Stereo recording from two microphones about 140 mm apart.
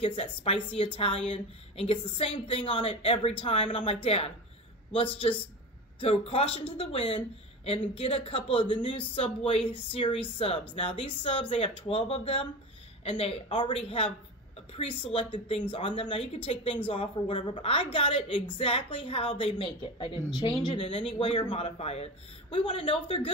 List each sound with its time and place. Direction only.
0.0 s speech: 40° left (ahead or behind)